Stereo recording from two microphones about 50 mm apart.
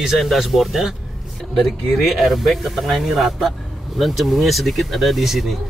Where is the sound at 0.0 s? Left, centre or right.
Centre.